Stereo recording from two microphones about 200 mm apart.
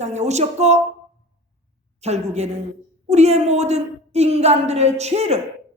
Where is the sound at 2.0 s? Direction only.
35° right (ahead or behind).